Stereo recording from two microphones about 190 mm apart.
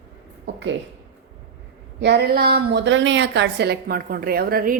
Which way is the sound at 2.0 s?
60° right (ahead or behind).